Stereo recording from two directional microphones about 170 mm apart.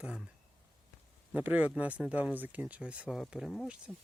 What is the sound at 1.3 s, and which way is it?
Speech, 10° right (ahead or behind).